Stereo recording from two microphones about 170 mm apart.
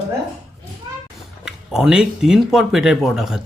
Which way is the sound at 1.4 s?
5° right (ahead or behind).